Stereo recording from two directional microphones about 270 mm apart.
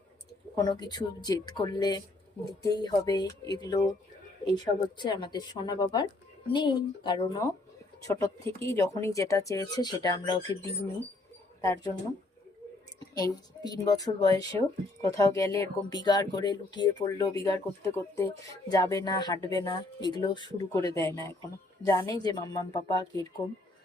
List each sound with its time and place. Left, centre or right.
0.5 s speech: centre
13.0 s speech: centre
20.9 s speech: centre
21.8 s speech: centre